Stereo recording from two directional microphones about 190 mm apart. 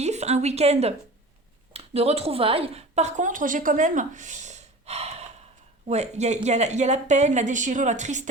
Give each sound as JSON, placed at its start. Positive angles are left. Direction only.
{"t": 0.0, "sound": "a woman's voice", "side_deg": -35}